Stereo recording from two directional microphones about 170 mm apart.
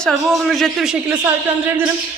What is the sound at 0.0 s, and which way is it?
Speech, centre (ahead or behind).